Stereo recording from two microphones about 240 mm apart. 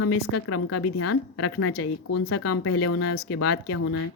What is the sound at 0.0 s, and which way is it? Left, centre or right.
Speech, left.